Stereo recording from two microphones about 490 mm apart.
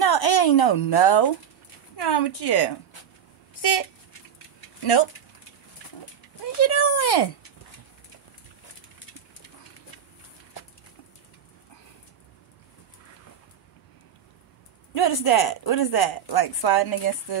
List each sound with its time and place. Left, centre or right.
0.0 s speech: left
6.4 s speech: left
15.0 s speech: left